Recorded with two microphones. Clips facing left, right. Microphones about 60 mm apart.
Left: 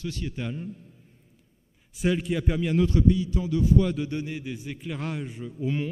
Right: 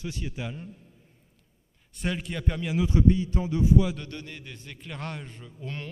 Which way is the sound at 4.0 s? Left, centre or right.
Centre.